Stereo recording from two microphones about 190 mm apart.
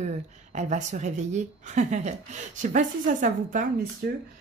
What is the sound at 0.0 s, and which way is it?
A woman's voice, 40° right (ahead or behind).